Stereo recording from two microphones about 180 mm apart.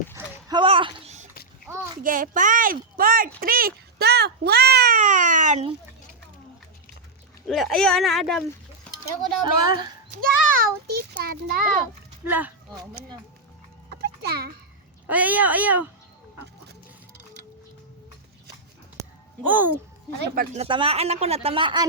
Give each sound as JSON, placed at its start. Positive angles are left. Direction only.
{"t": 0.1, "sound": "a sound", "side_deg": -20}
{"t": 2.0, "sound": "a child's voice", "side_deg": -50}
{"t": 7.4, "sound": "speech", "side_deg": 0}
{"t": 9.4, "sound": "a woman's voice", "side_deg": -25}
{"t": 10.2, "sound": "a sound", "side_deg": -55}
{"t": 12.2, "sound": "speech", "side_deg": -10}
{"t": 13.9, "sound": "a sound", "side_deg": -60}
{"t": 15.0, "sound": "speech", "side_deg": -10}
{"t": 19.5, "sound": "speech", "side_deg": -10}
{"t": 20.3, "sound": "a child's voice", "side_deg": -55}
{"t": 20.6, "sound": "speech", "side_deg": -30}